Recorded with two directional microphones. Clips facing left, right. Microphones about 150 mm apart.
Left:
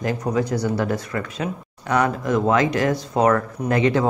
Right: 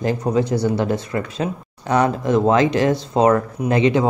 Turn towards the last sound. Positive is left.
turn(degrees=-20)  # may be behind; listen again after turning